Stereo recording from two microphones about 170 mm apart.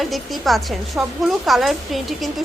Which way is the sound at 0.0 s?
Centre (ahead or behind).